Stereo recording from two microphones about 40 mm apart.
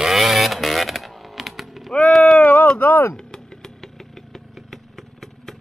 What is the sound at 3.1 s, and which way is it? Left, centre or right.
Vehicle, centre.